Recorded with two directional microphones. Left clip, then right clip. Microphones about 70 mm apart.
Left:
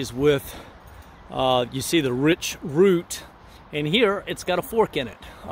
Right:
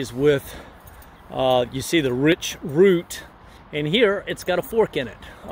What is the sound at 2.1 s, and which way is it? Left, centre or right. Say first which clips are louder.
Speech: right 2 dB; centre.